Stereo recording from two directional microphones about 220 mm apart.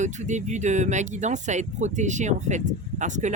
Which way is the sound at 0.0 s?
35° right (ahead or behind).